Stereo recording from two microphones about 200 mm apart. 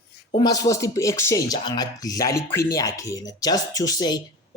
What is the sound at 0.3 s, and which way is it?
Speech, 20° left (ahead or behind).